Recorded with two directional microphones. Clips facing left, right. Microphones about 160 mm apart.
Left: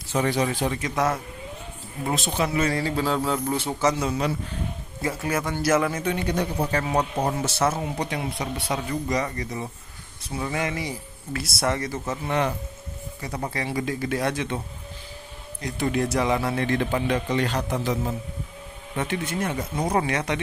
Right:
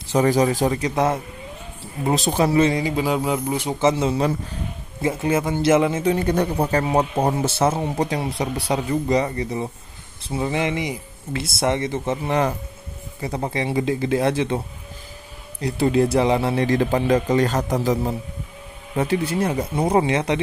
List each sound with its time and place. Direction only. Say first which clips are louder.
0.1 s speech: right 6 dB; 40° right (ahead or behind)
2.6 s a man's voice: right 4 dB; 20° right (ahead or behind)
6.1 s speech: right 5 dB; 50° right (ahead or behind)
6.7 s speech: right 5 dB; 30° right (ahead or behind)
15.6 s speech: right 6 dB; 30° right (ahead or behind)